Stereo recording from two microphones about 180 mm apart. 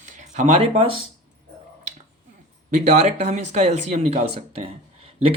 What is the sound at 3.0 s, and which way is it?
Speech, 40° right (ahead or behind).